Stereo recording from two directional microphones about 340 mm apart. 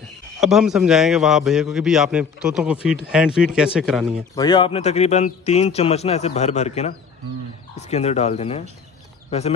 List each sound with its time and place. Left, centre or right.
0.4 s a man's voice: centre
4.4 s speech: centre